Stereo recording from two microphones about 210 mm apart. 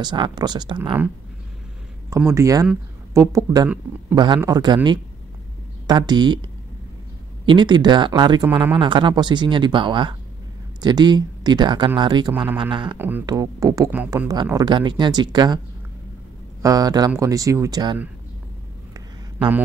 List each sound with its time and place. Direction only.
0.0 s speech: 20° right (ahead or behind)
2.0 s speech: 10° right (ahead or behind)
5.9 s speech: 20° right (ahead or behind)
7.4 s speech: 20° right (ahead or behind)
12.9 s speech: 10° right (ahead or behind)
16.6 s speech: 20° right (ahead or behind)
18.9 s a sound: 15° right (ahead or behind)